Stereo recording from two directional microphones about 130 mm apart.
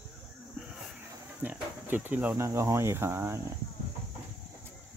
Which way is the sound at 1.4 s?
15° right (ahead or behind).